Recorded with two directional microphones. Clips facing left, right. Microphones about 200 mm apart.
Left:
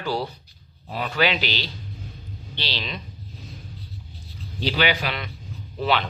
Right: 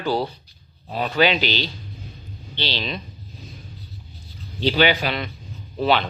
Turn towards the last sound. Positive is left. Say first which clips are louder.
# right 3 dB
turn(degrees=-30)  # may be behind; listen again after turning